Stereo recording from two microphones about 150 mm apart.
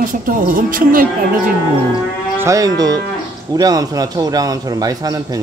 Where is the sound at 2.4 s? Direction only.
25° right (ahead or behind).